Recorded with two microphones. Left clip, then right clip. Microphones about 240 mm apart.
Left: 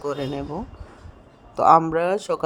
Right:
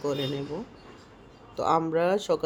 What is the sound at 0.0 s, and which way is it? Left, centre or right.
Speech, left.